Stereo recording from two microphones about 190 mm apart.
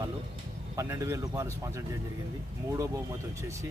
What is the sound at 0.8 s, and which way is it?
Speech, 15° right (ahead or behind).